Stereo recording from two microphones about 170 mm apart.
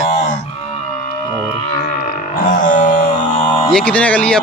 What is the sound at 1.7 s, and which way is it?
Music, 55° left (ahead or behind).